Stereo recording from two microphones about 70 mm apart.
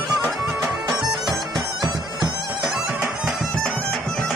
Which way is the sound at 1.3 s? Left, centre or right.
Right.